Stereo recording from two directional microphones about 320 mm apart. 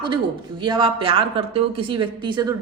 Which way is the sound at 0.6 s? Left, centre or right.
Centre.